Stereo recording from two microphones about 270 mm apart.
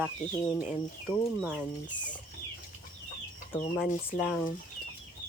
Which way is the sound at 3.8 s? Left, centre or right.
Centre.